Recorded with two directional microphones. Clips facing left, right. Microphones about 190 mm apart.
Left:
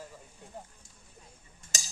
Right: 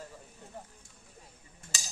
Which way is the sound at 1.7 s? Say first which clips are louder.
Left 2 dB; 45° left (ahead or behind).